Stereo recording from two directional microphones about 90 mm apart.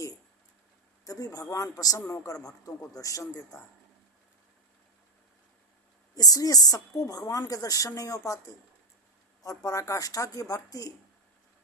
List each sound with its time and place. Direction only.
1.0 s a woman's voice: 40° left (ahead or behind)
6.1 s a woman's voice: 45° left (ahead or behind)
9.6 s a woman's voice: 35° left (ahead or behind)